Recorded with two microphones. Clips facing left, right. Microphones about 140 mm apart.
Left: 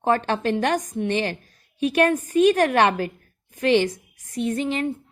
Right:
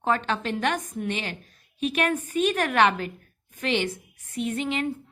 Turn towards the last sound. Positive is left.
turn(degrees=35)  # may be behind; listen again after turning